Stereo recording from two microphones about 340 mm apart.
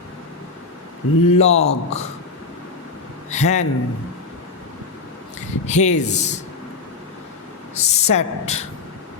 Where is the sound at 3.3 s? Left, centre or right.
Centre.